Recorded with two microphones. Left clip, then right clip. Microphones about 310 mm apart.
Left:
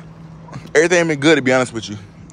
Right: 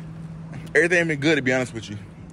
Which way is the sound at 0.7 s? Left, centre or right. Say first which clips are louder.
Left 5 dB; centre.